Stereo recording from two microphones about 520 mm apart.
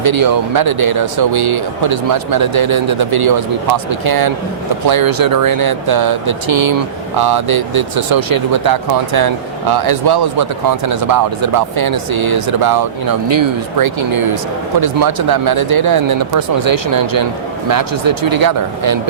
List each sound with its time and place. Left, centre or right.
0.0 s speech: right